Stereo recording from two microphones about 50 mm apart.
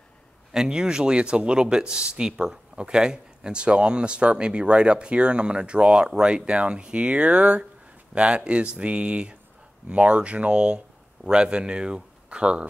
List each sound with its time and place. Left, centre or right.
0.5 s speech: centre